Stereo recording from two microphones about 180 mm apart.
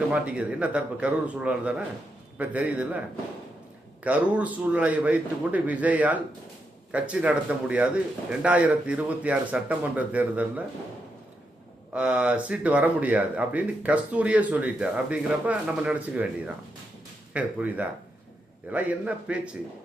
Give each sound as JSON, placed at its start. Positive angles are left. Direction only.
{"t": 0.1, "sound": "speech", "side_deg": -5}
{"t": 4.0, "sound": "speech", "side_deg": -5}
{"t": 11.9, "sound": "speech", "side_deg": -5}